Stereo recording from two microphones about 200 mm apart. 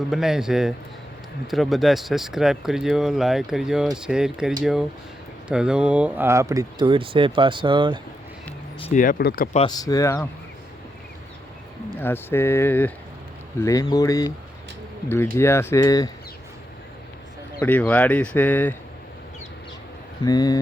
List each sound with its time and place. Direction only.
0.1 s speech: centre (ahead or behind); by 8.0 s 25° right (ahead or behind)
8.8 s speech: 40° left (ahead or behind)
9.6 s speech: 20° left (ahead or behind)
11.9 s speech: 10° left (ahead or behind)
17.6 s speech: 10° left (ahead or behind)
20.2 s speech: 20° left (ahead or behind)